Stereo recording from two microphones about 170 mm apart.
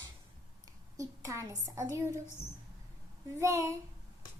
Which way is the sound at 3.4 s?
15° right (ahead or behind).